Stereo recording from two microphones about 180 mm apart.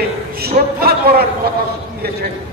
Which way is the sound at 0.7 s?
60° right (ahead or behind).